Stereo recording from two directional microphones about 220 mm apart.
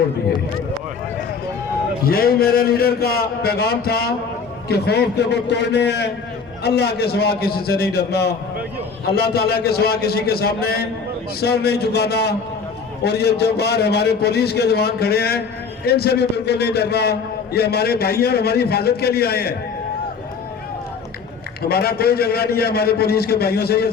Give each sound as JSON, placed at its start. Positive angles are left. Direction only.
{"t": 2.0, "sound": "a man's voice", "side_deg": 45}
{"t": 21.7, "sound": "a man's voice", "side_deg": 45}